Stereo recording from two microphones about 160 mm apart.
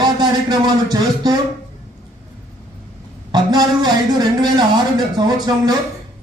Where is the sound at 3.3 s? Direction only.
25° right (ahead or behind).